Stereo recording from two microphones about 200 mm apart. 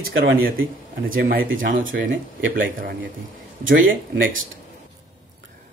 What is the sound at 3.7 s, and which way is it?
Speech, 70° right (ahead or behind).